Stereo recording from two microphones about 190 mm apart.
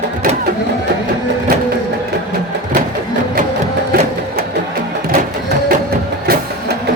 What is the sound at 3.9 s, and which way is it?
Music, 50° right (ahead or behind).